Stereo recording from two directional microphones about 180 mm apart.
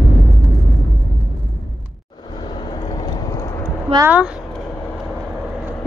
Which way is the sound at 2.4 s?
25° left (ahead or behind).